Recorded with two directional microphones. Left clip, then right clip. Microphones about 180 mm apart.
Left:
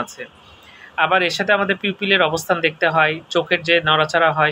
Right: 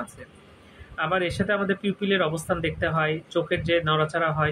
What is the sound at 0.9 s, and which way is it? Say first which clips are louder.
Speech: left 9 dB; 15° right (ahead or behind).